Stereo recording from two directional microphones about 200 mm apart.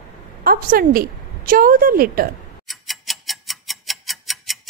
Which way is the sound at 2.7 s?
Centre (ahead or behind).